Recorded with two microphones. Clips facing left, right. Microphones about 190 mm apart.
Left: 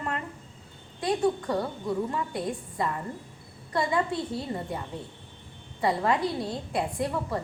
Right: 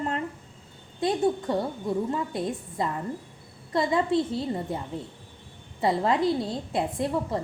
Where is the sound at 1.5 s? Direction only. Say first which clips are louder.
Right 2 dB; 25° right (ahead or behind).